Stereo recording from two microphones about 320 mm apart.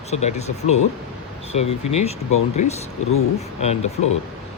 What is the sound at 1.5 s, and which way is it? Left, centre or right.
Speech, centre.